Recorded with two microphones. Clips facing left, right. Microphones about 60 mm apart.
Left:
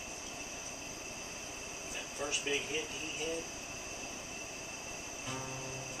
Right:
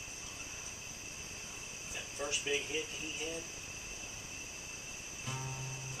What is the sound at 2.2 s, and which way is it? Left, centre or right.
Speech, centre.